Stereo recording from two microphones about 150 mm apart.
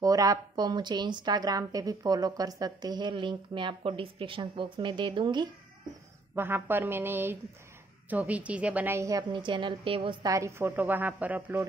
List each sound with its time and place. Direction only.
0.0 s a woman's voice: 25° right (ahead or behind)
6.3 s a woman's voice: 15° right (ahead or behind)
9.3 s a woman's voice: 30° right (ahead or behind)
10.2 s a woman's voice: 20° right (ahead or behind)